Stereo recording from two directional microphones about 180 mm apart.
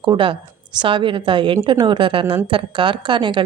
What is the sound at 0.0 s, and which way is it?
Speech, 25° right (ahead or behind).